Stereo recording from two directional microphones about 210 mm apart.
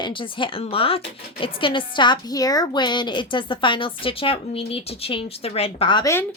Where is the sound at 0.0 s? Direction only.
25° left (ahead or behind).